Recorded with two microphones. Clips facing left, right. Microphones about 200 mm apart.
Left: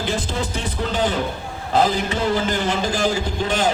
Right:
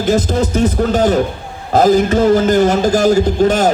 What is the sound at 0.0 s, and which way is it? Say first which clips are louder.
A man's voice: right 10 dB; 40° right (ahead or behind).